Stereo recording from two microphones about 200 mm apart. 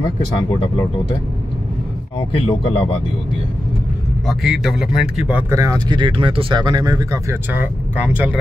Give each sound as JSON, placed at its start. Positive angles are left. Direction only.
{"t": 0.0, "sound": "speech", "side_deg": 20}
{"t": 2.1, "sound": "speech", "side_deg": 30}
{"t": 4.3, "sound": "speech", "side_deg": 0}